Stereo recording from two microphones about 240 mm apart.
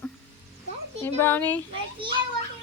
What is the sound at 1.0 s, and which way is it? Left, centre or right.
Speech, centre.